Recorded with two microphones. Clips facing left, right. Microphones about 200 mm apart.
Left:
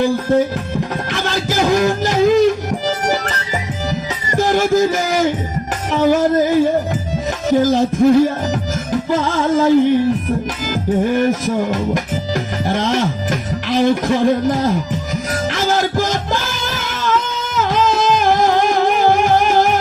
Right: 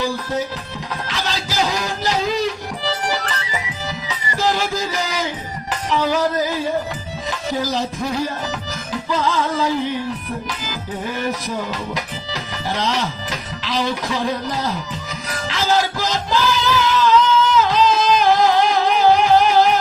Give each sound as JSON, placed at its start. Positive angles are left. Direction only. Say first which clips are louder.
{"t": 0.0, "sound": "music", "louder": "left 8 dB", "side_deg": 50}
{"t": 4.3, "sound": "a man's voice", "louder": "left 6 dB", "side_deg": 50}
{"t": 5.9, "sound": "music", "louder": "left 6 dB", "side_deg": 50}
{"t": 7.6, "sound": "music", "louder": "left 12 dB", "side_deg": 50}
{"t": 11.1, "sound": "music", "louder": "left 8 dB", "side_deg": 55}